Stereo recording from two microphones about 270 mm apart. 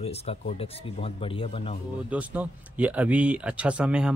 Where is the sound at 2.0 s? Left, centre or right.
Centre.